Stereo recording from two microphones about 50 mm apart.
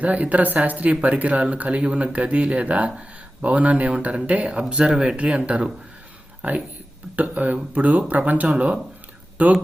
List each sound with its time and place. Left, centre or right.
0.0 s speech: right
4.7 s speech: centre; by 9.5 s right